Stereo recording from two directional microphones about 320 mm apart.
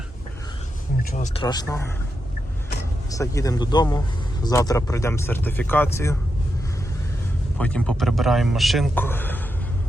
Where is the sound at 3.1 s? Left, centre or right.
Centre.